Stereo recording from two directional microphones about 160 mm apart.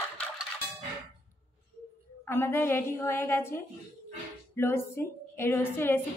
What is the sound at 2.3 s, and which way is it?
A woman's voice, 15° left (ahead or behind).